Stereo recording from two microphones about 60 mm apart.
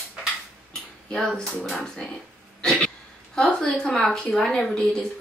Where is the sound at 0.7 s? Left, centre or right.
Centre.